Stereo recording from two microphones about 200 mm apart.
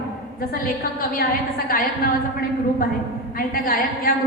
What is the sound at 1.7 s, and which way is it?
Speech, 45° left (ahead or behind).